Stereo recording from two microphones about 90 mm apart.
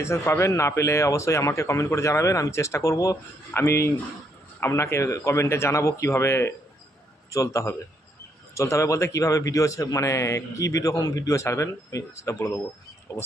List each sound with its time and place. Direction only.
0.0 s a man's voice: 30° left (ahead or behind)